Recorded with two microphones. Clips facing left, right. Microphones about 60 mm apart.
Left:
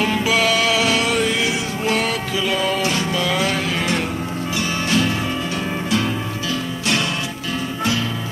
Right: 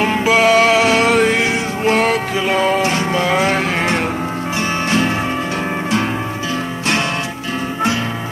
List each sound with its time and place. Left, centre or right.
0.0 s music: right